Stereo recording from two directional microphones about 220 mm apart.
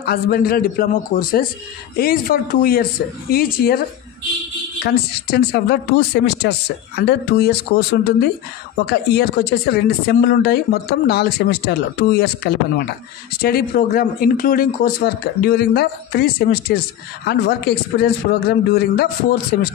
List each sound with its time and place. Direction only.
0.0 s speech: 45° left (ahead or behind)
4.8 s speech: 45° left (ahead or behind)